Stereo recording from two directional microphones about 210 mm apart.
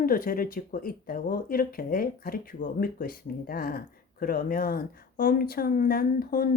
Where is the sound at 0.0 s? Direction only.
40° left (ahead or behind).